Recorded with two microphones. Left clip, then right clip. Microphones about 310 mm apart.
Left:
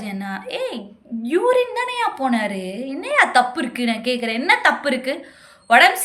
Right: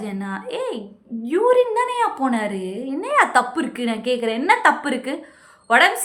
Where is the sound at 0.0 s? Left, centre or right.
Centre.